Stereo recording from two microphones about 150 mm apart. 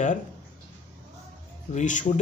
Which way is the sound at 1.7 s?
55° left (ahead or behind).